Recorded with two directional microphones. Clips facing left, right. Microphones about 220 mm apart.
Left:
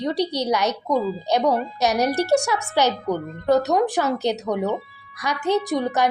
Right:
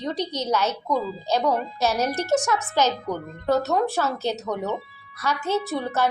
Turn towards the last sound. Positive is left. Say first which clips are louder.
# left 4 dB
turn(degrees=15)  # may be behind; listen again after turning